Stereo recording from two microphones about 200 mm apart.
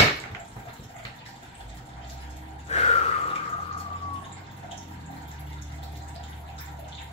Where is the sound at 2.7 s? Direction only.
30° left (ahead or behind).